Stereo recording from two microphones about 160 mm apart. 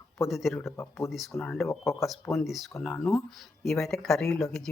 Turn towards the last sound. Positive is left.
turn(degrees=5)  # may be behind; listen again after turning